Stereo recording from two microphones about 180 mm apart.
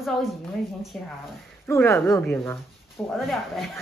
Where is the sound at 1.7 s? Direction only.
15° left (ahead or behind).